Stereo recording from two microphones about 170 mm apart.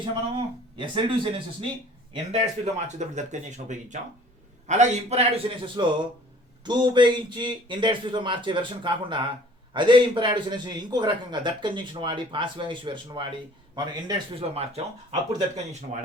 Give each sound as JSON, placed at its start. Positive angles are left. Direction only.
{"t": 0.0, "sound": "a man's voice", "side_deg": -30}
{"t": 2.3, "sound": "a man's voice", "side_deg": -45}